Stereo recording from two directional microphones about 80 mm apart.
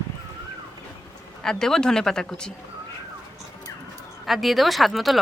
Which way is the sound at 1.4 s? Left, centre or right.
Centre.